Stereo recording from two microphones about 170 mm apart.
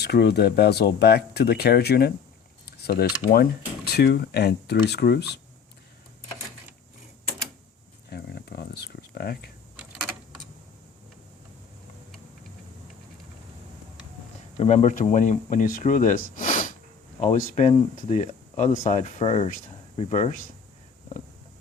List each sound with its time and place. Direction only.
0.0 s speech: 70° left (ahead or behind)
3.8 s speech: 75° left (ahead or behind)
8.1 s a sound: 75° left (ahead or behind)
14.6 s speech: 45° left (ahead or behind)